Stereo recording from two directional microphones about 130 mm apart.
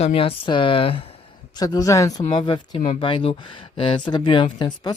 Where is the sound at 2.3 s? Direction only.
35° left (ahead or behind).